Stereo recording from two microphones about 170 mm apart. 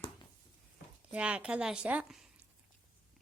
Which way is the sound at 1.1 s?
5° right (ahead or behind).